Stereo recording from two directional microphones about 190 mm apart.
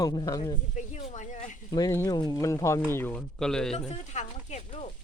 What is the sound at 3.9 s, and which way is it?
Speech, 40° left (ahead or behind).